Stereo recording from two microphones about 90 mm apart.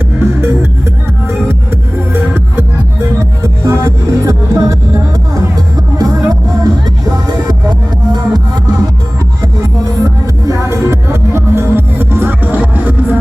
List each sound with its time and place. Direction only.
0.2 s music: 30° right (ahead or behind); by 6.9 s 45° right (ahead or behind)
8.1 s music: 50° right (ahead or behind)
9.4 s music: 35° right (ahead or behind); by 13.1 s 20° right (ahead or behind)